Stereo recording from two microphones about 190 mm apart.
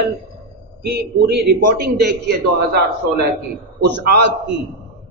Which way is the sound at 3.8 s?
65° right (ahead or behind).